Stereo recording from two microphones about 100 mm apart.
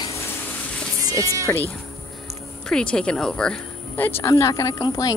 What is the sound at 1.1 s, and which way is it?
Speech, 35° right (ahead or behind).